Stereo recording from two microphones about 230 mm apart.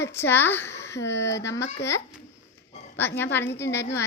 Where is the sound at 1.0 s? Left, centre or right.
Left.